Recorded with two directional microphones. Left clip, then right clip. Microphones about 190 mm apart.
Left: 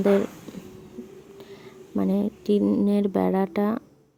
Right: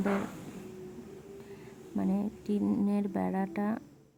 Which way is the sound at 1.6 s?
30° left (ahead or behind).